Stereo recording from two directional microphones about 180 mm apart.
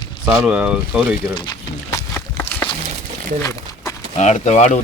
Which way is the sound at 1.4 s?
20° left (ahead or behind).